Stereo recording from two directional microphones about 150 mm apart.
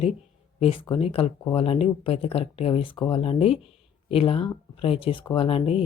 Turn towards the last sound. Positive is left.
turn(degrees=40)  # may be behind; listen again after turning